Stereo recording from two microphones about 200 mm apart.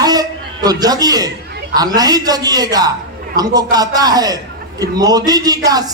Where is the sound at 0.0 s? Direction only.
20° right (ahead or behind).